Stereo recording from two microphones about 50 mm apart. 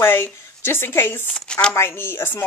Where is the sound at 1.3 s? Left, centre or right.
Centre.